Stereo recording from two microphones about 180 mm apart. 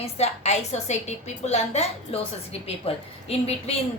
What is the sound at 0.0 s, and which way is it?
A woman's voice, 35° left (ahead or behind).